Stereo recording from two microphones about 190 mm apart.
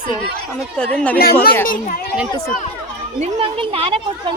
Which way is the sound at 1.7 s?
45° left (ahead or behind).